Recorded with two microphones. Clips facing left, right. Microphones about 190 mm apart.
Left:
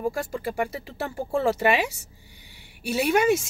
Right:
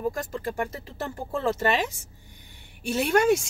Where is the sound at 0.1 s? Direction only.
10° left (ahead or behind).